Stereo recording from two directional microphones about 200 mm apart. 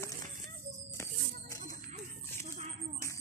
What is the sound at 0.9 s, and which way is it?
Music, 15° left (ahead or behind).